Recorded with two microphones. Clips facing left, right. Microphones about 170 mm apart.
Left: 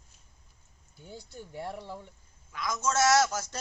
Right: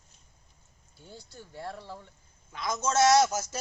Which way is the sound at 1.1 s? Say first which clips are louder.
Left 3 dB; 15° left (ahead or behind).